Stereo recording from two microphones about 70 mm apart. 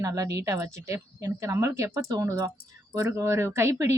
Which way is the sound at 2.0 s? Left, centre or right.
Right.